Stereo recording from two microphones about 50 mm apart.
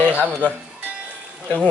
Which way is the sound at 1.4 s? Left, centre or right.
Left.